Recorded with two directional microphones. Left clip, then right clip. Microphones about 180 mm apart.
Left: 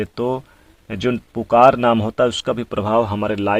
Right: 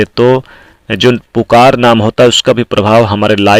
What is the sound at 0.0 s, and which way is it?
Speech, 30° right (ahead or behind).